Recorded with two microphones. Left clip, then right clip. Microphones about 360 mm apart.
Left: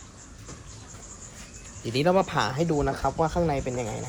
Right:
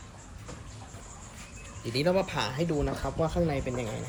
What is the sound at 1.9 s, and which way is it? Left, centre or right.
Speech, centre.